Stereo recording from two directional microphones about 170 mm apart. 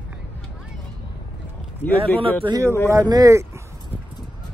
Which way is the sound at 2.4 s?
25° right (ahead or behind).